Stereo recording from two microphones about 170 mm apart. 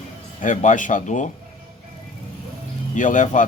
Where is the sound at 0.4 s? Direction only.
45° left (ahead or behind).